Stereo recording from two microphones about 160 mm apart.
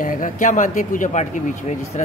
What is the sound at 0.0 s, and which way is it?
Speech, 55° left (ahead or behind).